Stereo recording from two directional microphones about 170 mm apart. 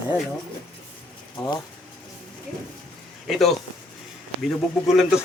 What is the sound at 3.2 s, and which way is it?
Speech, centre (ahead or behind).